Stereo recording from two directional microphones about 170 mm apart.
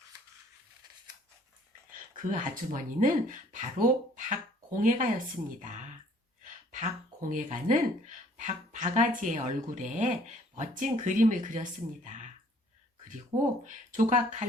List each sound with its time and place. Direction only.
2.1 s speech: 50° right (ahead or behind)
13.7 s speech: 50° right (ahead or behind)